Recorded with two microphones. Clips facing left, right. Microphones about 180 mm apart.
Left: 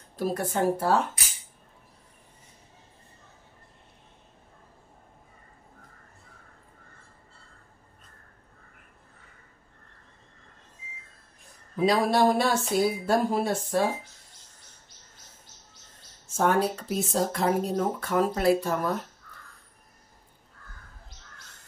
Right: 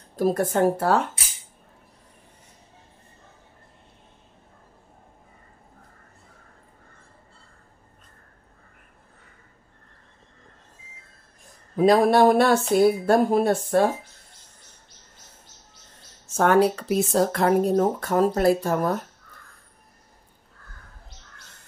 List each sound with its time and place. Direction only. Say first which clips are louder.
0.1 s speech: right 6 dB; 45° right (ahead or behind)
11.7 s speech: right 6 dB; 50° right (ahead or behind)
16.3 s speech: right 6 dB; 75° right (ahead or behind); by 17.7 s 60° right (ahead or behind)
17.7 s speech: right 5 dB; 40° right (ahead or behind)